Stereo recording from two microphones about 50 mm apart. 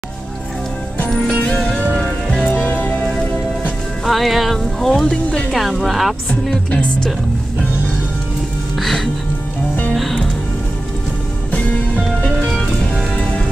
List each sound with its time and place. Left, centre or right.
1.1 s music: centre
2.4 s music: left
4.0 s music: centre
5.0 s speech: centre
5.5 s speech: centre
6.5 s music: centre
8.7 s music: centre
11.5 s music: left
12.4 s music: centre